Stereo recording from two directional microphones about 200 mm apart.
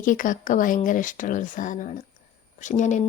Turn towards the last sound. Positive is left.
turn(degrees=35)  # may be behind; listen again after turning